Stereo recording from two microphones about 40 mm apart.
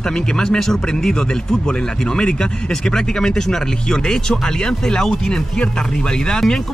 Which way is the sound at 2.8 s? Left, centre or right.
Centre.